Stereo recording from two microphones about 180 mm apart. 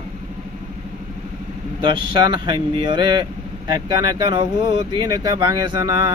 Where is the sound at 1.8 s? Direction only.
25° right (ahead or behind).